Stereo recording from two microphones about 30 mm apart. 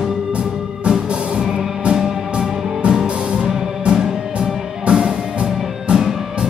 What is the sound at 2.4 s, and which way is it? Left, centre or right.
Music, right.